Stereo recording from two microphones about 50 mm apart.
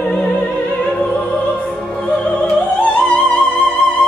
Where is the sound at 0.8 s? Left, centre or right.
Left.